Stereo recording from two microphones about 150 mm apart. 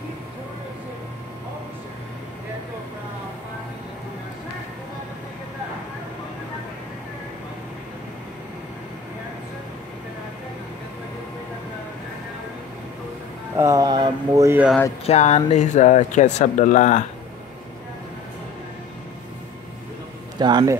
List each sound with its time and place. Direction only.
13.6 s speech: 20° right (ahead or behind)
15.0 s speech: 45° left (ahead or behind)
20.3 s speech: 30° right (ahead or behind)